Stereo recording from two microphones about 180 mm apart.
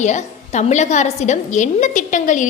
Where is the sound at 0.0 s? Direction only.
40° left (ahead or behind).